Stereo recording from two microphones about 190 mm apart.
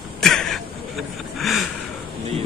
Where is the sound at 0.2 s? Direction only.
Centre (ahead or behind).